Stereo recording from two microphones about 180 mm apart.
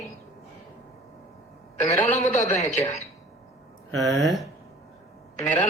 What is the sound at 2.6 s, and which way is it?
Speech, 40° left (ahead or behind).